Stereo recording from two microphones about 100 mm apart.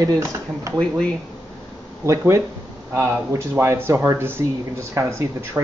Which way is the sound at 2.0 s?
30° right (ahead or behind).